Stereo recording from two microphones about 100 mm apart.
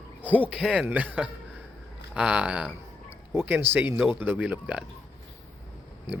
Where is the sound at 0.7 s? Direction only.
15° right (ahead or behind).